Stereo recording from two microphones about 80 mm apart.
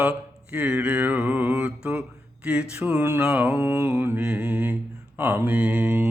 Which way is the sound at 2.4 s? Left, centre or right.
Centre.